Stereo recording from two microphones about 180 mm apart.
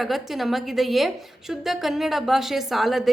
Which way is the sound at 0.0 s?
Centre (ahead or behind).